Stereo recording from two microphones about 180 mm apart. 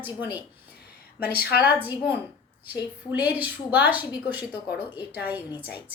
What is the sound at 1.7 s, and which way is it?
A woman's voice, 10° right (ahead or behind).